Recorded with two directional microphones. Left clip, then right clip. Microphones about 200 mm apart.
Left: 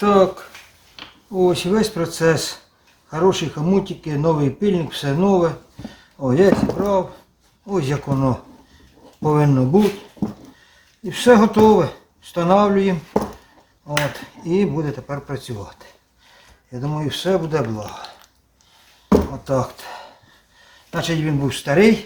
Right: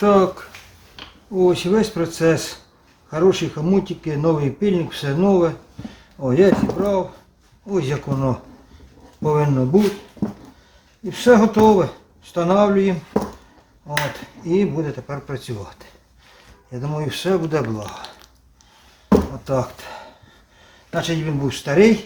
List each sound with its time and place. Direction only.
0.0 s speech: 15° right (ahead or behind)
7.7 s speech: centre (ahead or behind)
11.0 s speech: 5° left (ahead or behind)